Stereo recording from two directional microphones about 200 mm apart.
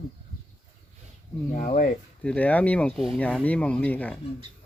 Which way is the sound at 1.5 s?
40° left (ahead or behind).